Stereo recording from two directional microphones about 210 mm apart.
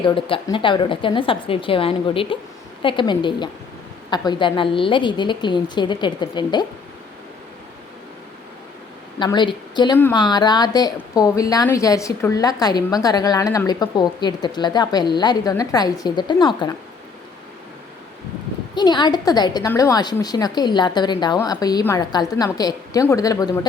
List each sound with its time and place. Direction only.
0.0 s a woman's voice: 25° left (ahead or behind)
9.1 s a woman's voice: 20° left (ahead or behind)
18.7 s a woman's voice: 20° left (ahead or behind)